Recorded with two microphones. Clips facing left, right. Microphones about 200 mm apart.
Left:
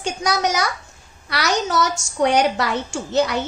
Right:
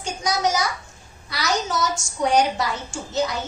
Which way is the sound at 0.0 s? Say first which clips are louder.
Left 2 dB; 70° left (ahead or behind).